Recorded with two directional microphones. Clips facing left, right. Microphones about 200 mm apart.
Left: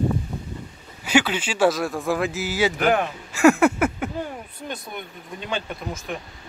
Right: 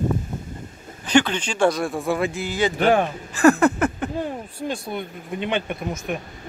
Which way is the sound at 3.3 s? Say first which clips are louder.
Even; 10° left (ahead or behind).